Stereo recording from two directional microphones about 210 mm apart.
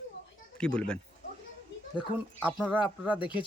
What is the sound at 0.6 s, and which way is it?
Speech, 5° left (ahead or behind).